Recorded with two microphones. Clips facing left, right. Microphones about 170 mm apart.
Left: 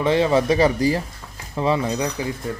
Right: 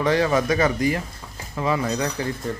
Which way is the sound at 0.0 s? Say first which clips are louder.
Left 2 dB; 20° left (ahead or behind).